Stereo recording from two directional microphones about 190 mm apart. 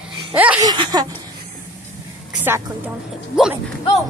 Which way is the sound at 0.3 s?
5° right (ahead or behind).